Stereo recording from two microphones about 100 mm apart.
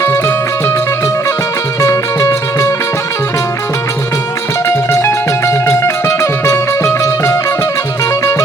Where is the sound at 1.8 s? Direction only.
30° left (ahead or behind).